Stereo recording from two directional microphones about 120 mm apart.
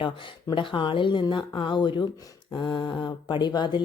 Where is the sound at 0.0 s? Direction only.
45° left (ahead or behind).